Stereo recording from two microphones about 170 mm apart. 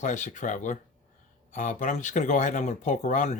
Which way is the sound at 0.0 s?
45° left (ahead or behind).